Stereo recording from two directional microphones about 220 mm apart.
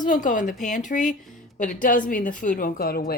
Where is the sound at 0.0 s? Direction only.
35° left (ahead or behind).